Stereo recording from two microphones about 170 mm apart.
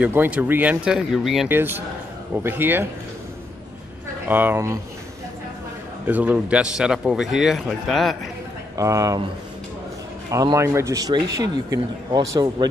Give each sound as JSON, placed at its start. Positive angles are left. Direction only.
{"t": 0.0, "sound": "speech", "side_deg": -10}
{"t": 1.5, "sound": "speech", "side_deg": -10}
{"t": 4.3, "sound": "speech", "side_deg": -10}
{"t": 6.0, "sound": "a man's voice", "side_deg": -10}
{"t": 8.7, "sound": "speech", "side_deg": -20}
{"t": 10.3, "sound": "speech", "side_deg": -20}